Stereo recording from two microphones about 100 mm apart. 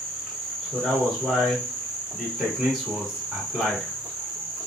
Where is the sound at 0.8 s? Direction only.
5° left (ahead or behind).